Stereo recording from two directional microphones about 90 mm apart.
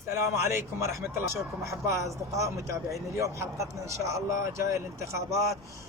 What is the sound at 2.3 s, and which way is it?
Speech, 35° right (ahead or behind).